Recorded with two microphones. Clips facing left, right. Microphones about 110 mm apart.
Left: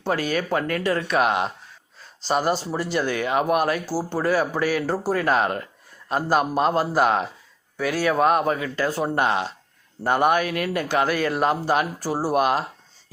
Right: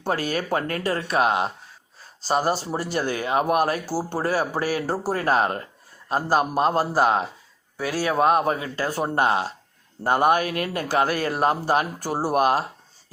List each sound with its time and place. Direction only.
0.1 s speech: 40° right (ahead or behind)